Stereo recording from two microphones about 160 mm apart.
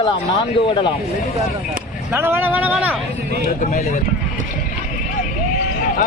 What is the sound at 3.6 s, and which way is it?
Speech, 55° left (ahead or behind).